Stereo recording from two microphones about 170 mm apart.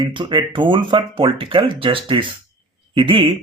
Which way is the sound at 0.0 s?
30° right (ahead or behind).